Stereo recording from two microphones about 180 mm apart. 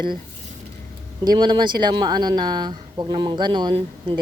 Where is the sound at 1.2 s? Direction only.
25° right (ahead or behind).